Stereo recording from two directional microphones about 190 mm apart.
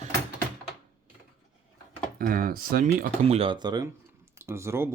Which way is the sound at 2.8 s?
35° right (ahead or behind).